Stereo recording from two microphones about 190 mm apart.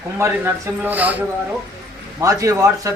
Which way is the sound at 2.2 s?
15° right (ahead or behind).